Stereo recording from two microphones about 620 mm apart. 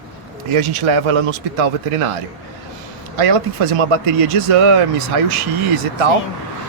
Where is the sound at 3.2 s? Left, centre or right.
Right.